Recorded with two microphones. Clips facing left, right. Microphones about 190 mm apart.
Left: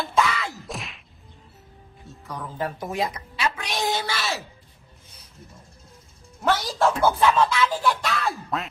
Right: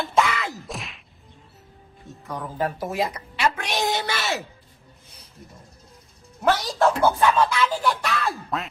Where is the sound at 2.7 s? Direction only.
5° right (ahead or behind).